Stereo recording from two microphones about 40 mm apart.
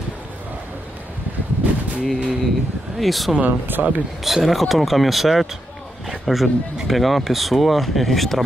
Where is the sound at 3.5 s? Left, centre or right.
Right.